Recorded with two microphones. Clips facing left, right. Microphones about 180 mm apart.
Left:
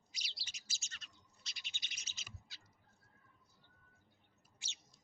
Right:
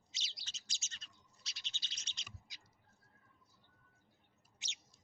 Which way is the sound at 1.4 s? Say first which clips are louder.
Even; centre (ahead or behind).